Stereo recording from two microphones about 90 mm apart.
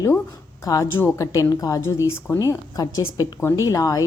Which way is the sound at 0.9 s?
25° left (ahead or behind).